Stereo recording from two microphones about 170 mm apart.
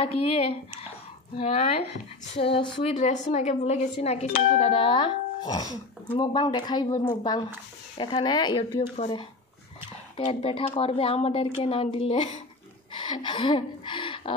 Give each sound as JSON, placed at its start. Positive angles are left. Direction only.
{"t": 0.0, "sound": "speech", "side_deg": 35}
{"t": 3.0, "sound": "speech", "side_deg": 45}
{"t": 10.1, "sound": "speech", "side_deg": 35}